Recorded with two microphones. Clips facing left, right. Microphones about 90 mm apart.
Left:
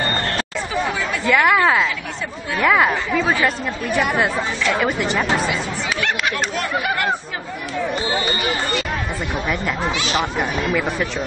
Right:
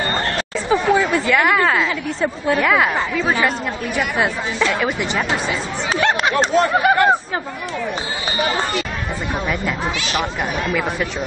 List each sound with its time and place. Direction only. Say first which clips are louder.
0.7 s chatter: right 9 dB; 35° right (ahead or behind)
1.2 s speech: left 1 dB; centre (ahead or behind)
5.5 s speech: right 1 dB; 30° right (ahead or behind)